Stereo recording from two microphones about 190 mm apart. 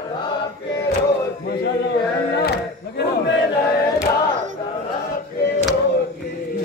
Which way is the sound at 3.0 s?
65° left (ahead or behind).